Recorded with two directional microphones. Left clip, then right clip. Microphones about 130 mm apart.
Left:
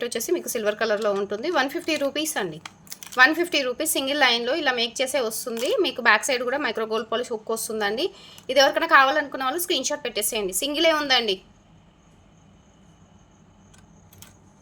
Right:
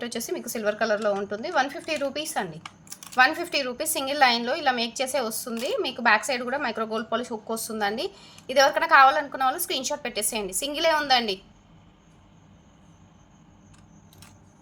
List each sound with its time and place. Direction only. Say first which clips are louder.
0.0 s a woman's voice: left 6 dB; 40° left (ahead or behind)